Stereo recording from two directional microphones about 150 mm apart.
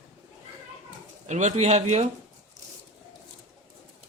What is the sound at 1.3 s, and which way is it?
Speech, 50° right (ahead or behind).